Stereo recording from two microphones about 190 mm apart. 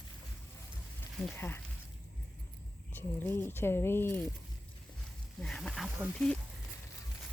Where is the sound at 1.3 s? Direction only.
10° left (ahead or behind).